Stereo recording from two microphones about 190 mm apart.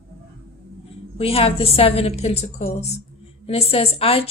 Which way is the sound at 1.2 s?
30° left (ahead or behind).